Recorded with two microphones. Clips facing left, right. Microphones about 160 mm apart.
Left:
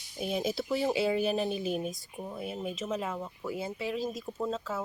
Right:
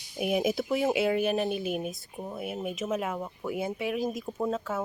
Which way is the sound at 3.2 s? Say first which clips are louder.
Right 4 dB; 20° right (ahead or behind).